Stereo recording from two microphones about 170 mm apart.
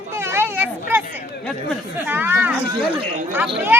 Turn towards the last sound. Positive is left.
turn(degrees=-5)  # may be behind; listen again after turning